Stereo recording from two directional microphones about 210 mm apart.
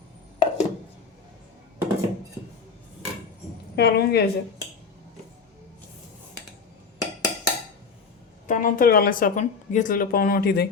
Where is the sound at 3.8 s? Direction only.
50° left (ahead or behind).